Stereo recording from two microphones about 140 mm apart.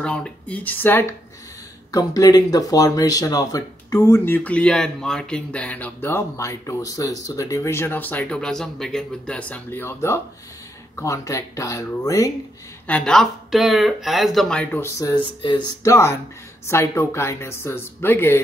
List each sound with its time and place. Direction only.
0.0 s speech: 10° left (ahead or behind)
1.9 s speech: 25° left (ahead or behind)
12.8 s speech: 10° left (ahead or behind); by 15.9 s 30° left (ahead or behind)
15.9 s speech: 20° left (ahead or behind)